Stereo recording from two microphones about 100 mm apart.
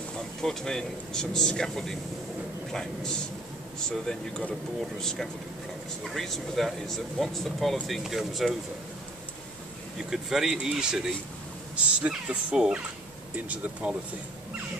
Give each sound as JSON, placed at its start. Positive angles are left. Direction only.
{"t": 0.4, "sound": "speech", "side_deg": 5}
{"t": 9.9, "sound": "speech", "side_deg": -5}